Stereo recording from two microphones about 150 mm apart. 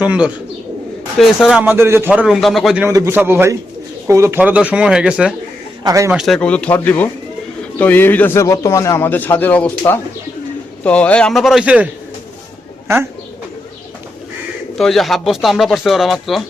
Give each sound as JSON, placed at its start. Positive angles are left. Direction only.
{"t": 0.0, "sound": "speech", "side_deg": -10}
{"t": 1.6, "sound": "speech", "side_deg": -15}
{"t": 2.8, "sound": "speech", "side_deg": -20}
{"t": 5.8, "sound": "a man's voice", "side_deg": -20}
{"t": 6.1, "sound": "a man's voice", "side_deg": 0}
{"t": 14.8, "sound": "speech", "side_deg": 0}